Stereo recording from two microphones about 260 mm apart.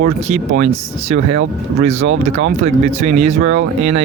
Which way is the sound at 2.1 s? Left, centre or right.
Right.